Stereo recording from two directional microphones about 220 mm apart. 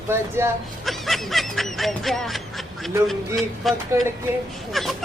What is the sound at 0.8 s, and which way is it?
Speech, centre (ahead or behind).